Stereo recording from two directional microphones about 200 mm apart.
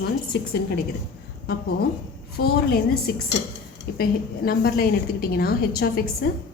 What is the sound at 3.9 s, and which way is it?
A woman's voice, 50° left (ahead or behind).